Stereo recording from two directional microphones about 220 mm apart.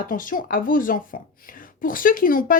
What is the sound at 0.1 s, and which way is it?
Speech, 40° left (ahead or behind).